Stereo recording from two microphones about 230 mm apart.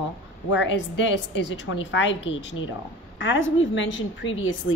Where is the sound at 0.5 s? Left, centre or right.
Left.